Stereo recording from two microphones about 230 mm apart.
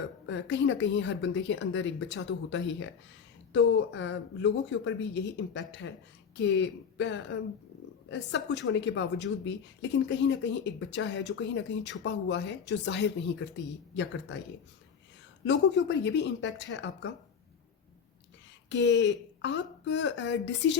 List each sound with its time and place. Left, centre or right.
0.3 s a woman's voice: left
15.4 s a woman's voice: left
18.7 s a woman's voice: left